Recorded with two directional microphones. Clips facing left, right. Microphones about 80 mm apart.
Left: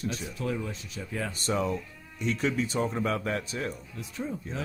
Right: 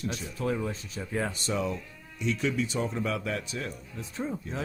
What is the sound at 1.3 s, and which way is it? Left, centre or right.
Speech, left.